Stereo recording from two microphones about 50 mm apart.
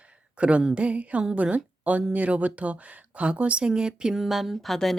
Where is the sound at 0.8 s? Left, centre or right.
Right.